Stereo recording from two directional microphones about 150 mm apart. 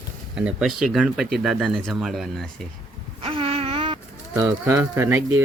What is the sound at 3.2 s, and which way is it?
Wail, 40° right (ahead or behind).